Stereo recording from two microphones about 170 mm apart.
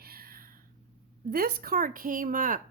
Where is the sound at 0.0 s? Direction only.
60° right (ahead or behind).